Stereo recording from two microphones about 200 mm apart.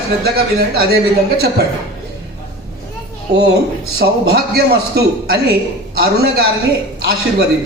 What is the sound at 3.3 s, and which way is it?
A man's voice, 55° right (ahead or behind).